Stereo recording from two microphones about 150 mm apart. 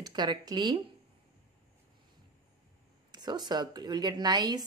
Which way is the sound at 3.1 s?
30° right (ahead or behind).